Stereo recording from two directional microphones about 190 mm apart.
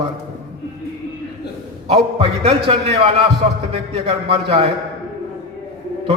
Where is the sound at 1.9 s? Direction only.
35° right (ahead or behind).